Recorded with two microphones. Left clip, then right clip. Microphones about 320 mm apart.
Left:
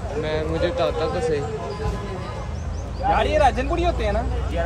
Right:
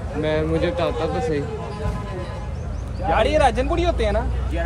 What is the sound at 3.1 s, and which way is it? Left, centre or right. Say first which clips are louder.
Speech: right 1 dB; right.